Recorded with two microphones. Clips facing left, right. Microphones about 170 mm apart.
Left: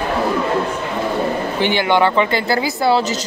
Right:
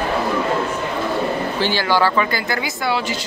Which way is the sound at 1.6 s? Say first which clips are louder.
Left 3 dB; 20° left (ahead or behind).